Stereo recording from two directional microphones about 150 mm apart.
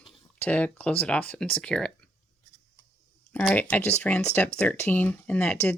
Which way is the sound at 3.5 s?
10° left (ahead or behind).